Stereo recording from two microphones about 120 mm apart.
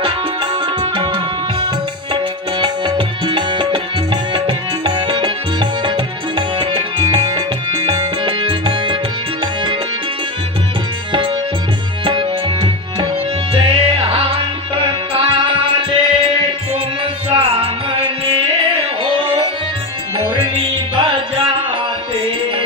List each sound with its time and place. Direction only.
0.9 s music: 45° right (ahead or behind)
2.6 s tabla: 45° right (ahead or behind)
12.0 s tabla: 45° right (ahead or behind)
13.6 s music: 45° right (ahead or behind)
20.9 s music: 45° right (ahead or behind)